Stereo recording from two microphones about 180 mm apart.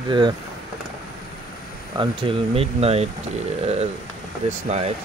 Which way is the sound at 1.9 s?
30° right (ahead or behind).